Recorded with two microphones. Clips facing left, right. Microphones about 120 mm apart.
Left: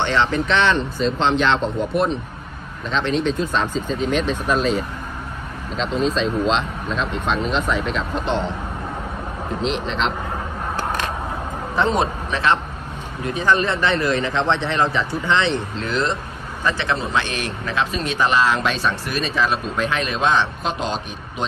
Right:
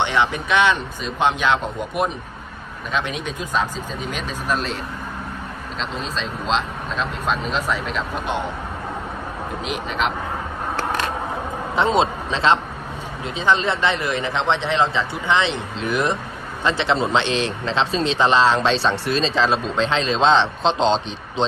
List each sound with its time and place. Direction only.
0.0 s speech: 15° right (ahead or behind)
9.6 s speech: 5° right (ahead or behind)
11.7 s a man's voice: 20° right (ahead or behind)